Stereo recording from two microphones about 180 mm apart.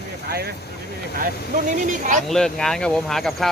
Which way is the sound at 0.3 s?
60° right (ahead or behind).